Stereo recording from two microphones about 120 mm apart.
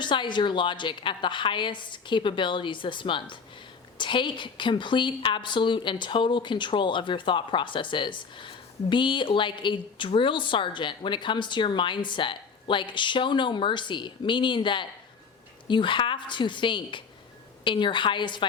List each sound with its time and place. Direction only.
0.0 s a woman's voice: 40° left (ahead or behind)